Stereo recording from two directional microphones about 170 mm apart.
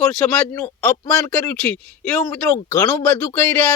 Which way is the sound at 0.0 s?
5° left (ahead or behind).